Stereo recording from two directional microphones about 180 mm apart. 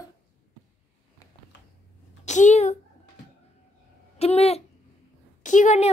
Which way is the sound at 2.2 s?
40° left (ahead or behind).